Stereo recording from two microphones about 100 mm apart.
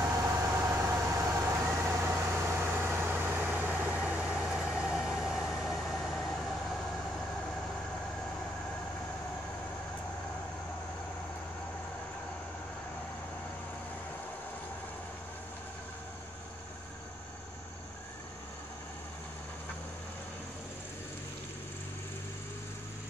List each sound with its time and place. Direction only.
0.0 s vehicle: 30° right (ahead or behind); by 7.0 s centre (ahead or behind)